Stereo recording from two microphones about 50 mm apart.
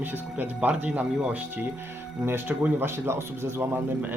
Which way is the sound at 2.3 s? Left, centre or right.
Right.